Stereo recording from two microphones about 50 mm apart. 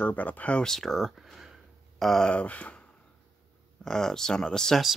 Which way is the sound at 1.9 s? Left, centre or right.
Centre.